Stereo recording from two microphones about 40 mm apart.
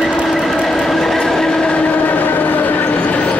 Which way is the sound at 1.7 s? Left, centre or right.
Left.